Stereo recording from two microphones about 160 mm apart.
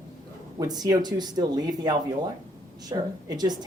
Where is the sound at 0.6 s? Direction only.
25° right (ahead or behind).